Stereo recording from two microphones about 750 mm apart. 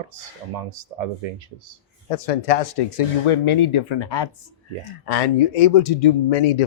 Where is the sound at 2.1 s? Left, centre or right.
Left.